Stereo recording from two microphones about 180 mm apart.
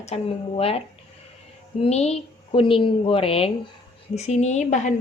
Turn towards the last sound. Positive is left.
turn(degrees=40)  # may be behind; listen again after turning